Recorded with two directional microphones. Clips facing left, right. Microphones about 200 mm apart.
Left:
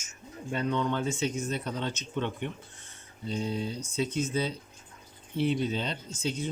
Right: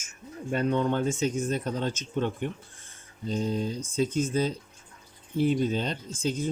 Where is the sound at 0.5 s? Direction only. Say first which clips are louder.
Right 4 dB; 50° right (ahead or behind).